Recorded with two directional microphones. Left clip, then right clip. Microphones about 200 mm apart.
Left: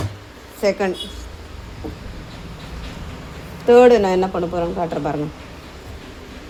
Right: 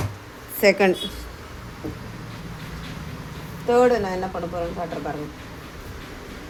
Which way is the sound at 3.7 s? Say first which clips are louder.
Left 7 dB; 55° left (ahead or behind).